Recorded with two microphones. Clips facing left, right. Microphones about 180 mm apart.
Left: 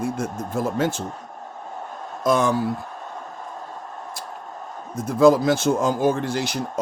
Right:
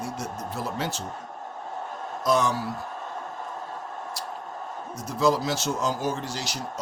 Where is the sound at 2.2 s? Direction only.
50° left (ahead or behind).